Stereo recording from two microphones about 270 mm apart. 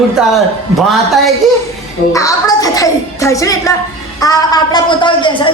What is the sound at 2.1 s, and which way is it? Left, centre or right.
A woman's voice, centre.